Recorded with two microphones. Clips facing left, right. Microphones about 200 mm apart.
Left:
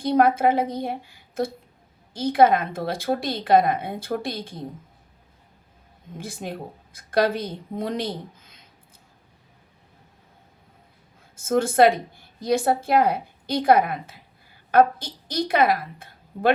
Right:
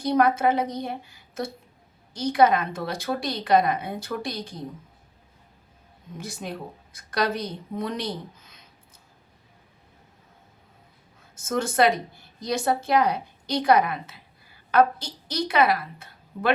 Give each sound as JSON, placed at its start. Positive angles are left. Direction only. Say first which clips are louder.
{"t": 0.0, "sound": "a woman's voice", "louder": "left 2 dB", "side_deg": 55}
{"t": 6.1, "sound": "a woman's voice", "louder": "left 2 dB", "side_deg": 55}
{"t": 11.3, "sound": "a woman's voice", "louder": "left 5 dB", "side_deg": 55}